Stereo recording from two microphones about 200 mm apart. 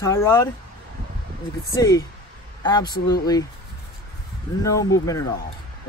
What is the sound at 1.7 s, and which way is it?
Speech, 15° left (ahead or behind).